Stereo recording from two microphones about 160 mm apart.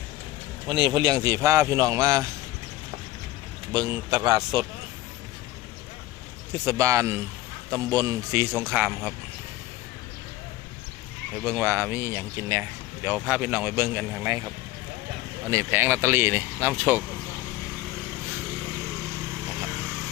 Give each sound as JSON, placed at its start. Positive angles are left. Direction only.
{"t": 0.7, "sound": "a man's voice", "side_deg": -30}
{"t": 3.7, "sound": "a man's voice", "side_deg": -25}
{"t": 6.5, "sound": "a man's voice", "side_deg": -20}
{"t": 11.6, "sound": "speech", "side_deg": -15}
{"t": 14.3, "sound": "a man's voice", "side_deg": -25}